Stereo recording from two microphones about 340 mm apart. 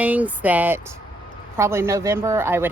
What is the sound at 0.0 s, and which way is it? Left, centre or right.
Speech, centre.